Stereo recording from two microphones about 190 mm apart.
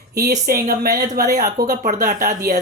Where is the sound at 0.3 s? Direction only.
50° right (ahead or behind).